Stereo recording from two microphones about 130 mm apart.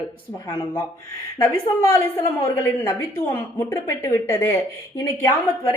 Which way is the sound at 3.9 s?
20° left (ahead or behind).